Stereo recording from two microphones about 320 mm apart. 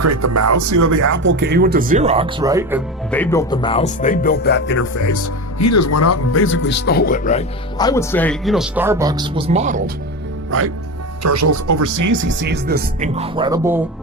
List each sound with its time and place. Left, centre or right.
0.0 s speech: right
1.1 s speech: right; by 2.8 s centre
3.1 s speech: centre; by 4.9 s left
4.9 s speech: left
7.8 s speech: centre; by 9.9 s right
10.5 s speech: right
11.2 s speech: right
12.1 s speech: right; by 13.8 s centre